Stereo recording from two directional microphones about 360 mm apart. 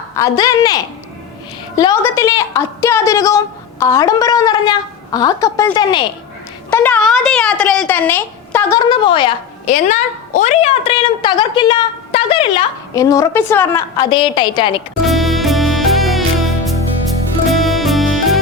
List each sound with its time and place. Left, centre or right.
0.2 s speech: centre
15.0 s music: centre